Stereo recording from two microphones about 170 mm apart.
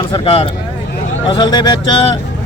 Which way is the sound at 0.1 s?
35° left (ahead or behind).